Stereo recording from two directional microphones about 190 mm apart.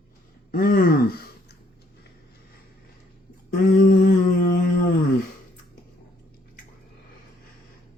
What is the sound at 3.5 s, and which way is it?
Mantra, 50° left (ahead or behind).